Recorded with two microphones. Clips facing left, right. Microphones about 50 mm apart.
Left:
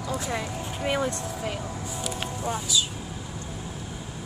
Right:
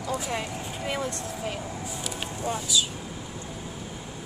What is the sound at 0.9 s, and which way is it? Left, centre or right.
Speech, left.